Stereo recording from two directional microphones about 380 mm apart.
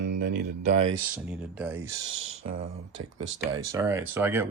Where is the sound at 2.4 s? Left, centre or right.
Right.